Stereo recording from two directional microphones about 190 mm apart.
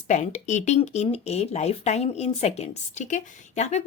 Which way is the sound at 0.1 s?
40° left (ahead or behind).